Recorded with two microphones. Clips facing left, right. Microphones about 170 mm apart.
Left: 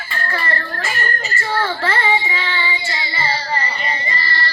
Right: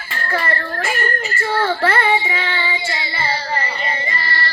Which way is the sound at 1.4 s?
55° right (ahead or behind).